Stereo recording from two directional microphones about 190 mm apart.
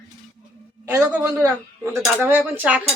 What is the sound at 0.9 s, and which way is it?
A woman's voice, 15° right (ahead or behind).